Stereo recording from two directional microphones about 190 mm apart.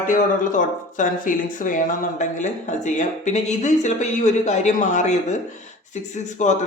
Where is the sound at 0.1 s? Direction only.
45° left (ahead or behind).